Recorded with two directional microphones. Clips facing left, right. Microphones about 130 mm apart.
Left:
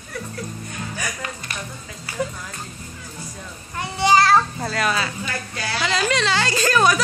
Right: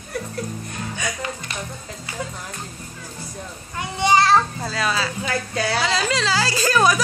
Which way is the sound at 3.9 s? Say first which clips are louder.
Left 1 dB; 20° right (ahead or behind).